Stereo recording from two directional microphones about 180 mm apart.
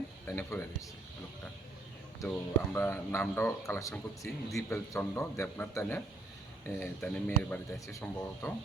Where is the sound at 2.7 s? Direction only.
10° left (ahead or behind).